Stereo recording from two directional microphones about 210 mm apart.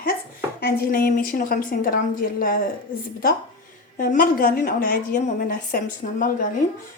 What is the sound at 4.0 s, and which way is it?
A woman's voice, 40° left (ahead or behind).